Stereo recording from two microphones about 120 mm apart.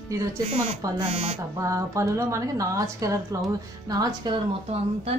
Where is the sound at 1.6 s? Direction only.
25° right (ahead or behind).